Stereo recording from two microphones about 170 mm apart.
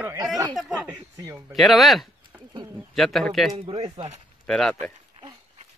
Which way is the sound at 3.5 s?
30° right (ahead or behind).